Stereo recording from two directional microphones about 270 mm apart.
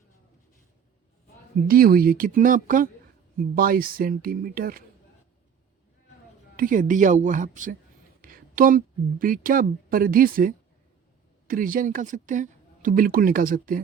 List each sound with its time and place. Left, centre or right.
1.6 s speech: right
6.6 s speech: right